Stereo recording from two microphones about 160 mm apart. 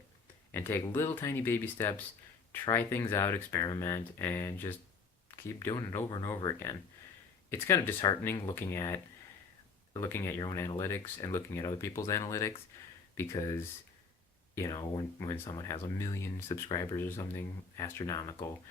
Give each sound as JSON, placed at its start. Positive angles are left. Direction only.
{"t": 0.5, "sound": "speech", "side_deg": 15}